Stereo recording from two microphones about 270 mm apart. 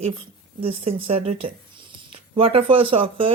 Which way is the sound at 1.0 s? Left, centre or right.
Right.